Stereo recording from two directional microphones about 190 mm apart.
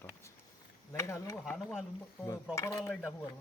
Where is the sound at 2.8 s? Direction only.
Centre (ahead or behind).